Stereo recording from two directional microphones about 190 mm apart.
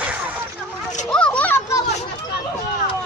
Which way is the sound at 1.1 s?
5° left (ahead or behind).